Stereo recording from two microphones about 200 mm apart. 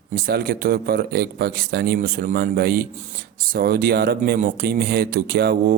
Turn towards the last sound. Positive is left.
turn(degrees=-50)  # may be behind; listen again after turning